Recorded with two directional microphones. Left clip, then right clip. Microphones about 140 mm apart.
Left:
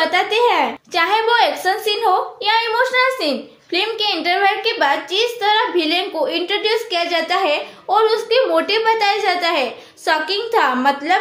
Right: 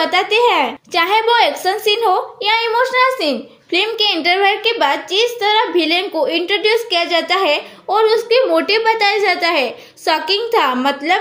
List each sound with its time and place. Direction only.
0.0 s a woman's voice: 45° right (ahead or behind)